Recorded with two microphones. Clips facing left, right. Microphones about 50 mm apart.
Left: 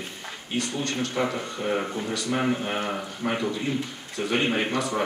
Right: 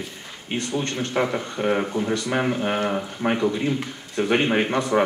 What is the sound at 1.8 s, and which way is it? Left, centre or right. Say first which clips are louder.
Speech: right 5 dB; centre.